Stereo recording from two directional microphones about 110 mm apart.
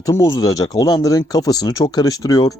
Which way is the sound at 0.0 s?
30° left (ahead or behind).